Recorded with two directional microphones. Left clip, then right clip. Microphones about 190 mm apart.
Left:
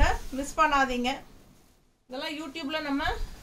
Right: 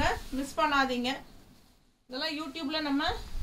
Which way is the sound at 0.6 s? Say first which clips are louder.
Left 3 dB; 15° left (ahead or behind).